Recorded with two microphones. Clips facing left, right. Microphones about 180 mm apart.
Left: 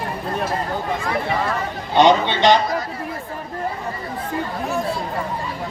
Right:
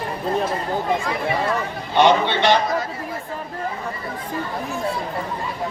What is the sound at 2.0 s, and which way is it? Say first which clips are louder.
Speech: left 2 dB; 15° left (ahead or behind).